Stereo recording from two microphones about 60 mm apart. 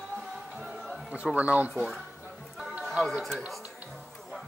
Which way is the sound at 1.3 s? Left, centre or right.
Right.